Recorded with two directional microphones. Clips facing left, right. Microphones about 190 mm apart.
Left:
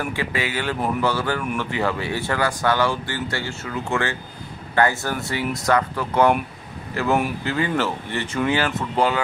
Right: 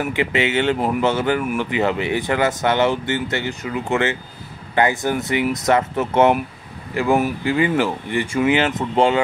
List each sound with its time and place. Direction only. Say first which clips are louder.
0.1 s speech: right 6 dB; 20° right (ahead or behind)
8.5 s speech: right 4 dB; 20° right (ahead or behind)